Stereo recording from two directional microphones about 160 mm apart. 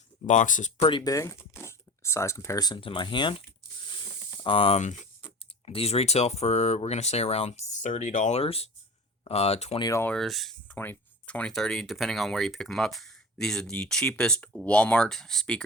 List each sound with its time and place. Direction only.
0.3 s speech: 50° left (ahead or behind)
0.8 s speech: 30° left (ahead or behind)
9.8 s speech: 20° left (ahead or behind)
10.1 s speech: centre (ahead or behind)